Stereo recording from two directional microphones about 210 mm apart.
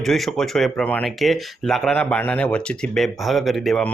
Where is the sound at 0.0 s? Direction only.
Centre (ahead or behind).